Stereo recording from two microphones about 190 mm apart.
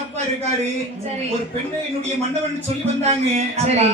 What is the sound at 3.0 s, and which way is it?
Speech, 35° right (ahead or behind).